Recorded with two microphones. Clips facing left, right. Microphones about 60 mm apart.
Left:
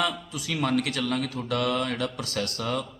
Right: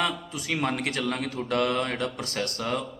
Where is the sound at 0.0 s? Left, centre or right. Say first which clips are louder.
Even; right.